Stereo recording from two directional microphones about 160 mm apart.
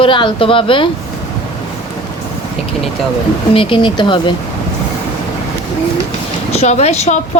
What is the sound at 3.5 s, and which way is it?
Speech, 35° left (ahead or behind).